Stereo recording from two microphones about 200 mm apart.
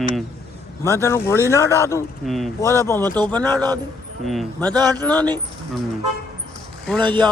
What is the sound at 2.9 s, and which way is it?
Speech, 10° left (ahead or behind).